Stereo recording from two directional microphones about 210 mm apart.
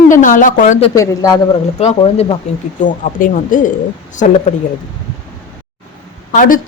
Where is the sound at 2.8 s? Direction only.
40° left (ahead or behind).